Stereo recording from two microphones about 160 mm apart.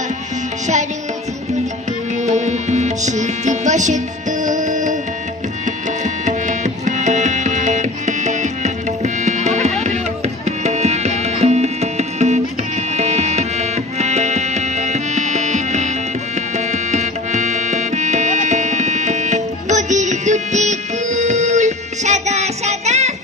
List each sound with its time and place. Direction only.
2.2 s music: 45° right (ahead or behind)
6.2 s music: 50° right (ahead or behind)
9.2 s insect: 45° right (ahead or behind)
10.4 s music: 45° right (ahead or behind)